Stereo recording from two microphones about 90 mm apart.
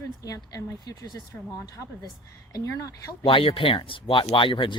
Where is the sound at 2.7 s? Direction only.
35° left (ahead or behind).